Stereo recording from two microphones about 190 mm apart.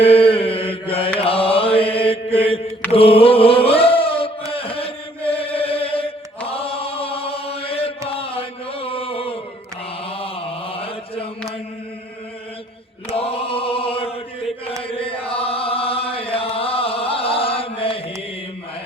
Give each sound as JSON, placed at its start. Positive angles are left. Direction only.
{"t": 0.0, "sound": "mantra", "side_deg": 30}
{"t": 4.5, "sound": "chant", "side_deg": 30}
{"t": 13.1, "sound": "chant", "side_deg": 30}